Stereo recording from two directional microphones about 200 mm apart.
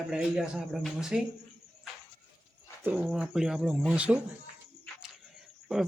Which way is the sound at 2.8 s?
10° right (ahead or behind).